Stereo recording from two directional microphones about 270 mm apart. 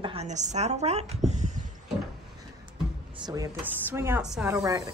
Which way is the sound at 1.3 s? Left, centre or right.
Right.